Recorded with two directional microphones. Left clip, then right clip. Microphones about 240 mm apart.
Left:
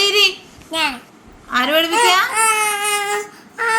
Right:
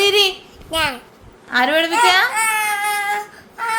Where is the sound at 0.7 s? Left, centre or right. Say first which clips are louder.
Even; right.